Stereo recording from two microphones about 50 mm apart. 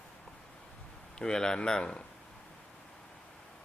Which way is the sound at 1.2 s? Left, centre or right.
Centre.